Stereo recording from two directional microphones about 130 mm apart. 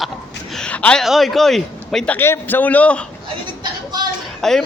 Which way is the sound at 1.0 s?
Centre (ahead or behind).